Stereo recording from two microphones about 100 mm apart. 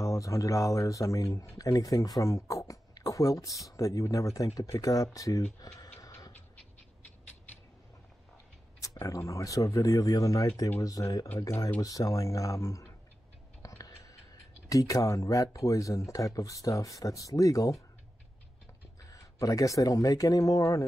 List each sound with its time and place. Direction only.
0.0 s speech: 35° left (ahead or behind)
5.6 s a sound: 35° left (ahead or behind)
9.0 s speech: 35° left (ahead or behind)
13.6 s music: 35° left (ahead or behind)
14.7 s speech: 35° left (ahead or behind)
19.0 s speech: 35° left (ahead or behind)